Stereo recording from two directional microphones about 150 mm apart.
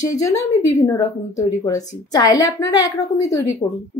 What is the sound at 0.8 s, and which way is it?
A woman's voice, 20° left (ahead or behind).